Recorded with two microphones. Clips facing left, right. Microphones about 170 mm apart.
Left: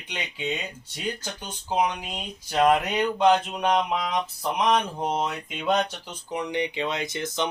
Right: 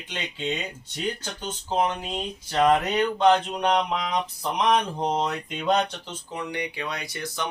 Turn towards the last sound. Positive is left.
turn(degrees=20)  # may be behind; listen again after turning